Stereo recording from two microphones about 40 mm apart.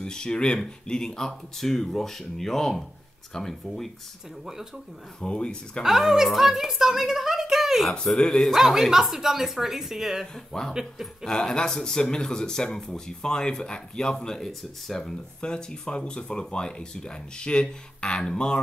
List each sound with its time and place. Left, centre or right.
0.0 s speech: left
5.2 s speech: left
5.8 s a woman's voice: centre
8.2 s speech: centre
8.5 s a woman's voice: centre
10.3 s speech: centre
10.7 s a woman's voice: centre
11.2 s speech: centre